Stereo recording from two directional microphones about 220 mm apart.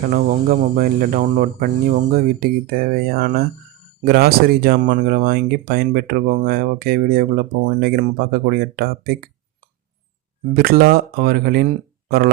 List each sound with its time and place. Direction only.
0.0 s speech: 40° right (ahead or behind)
10.5 s speech: 45° right (ahead or behind)